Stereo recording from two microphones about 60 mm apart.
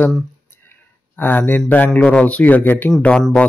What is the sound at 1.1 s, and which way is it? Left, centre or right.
Speech, left.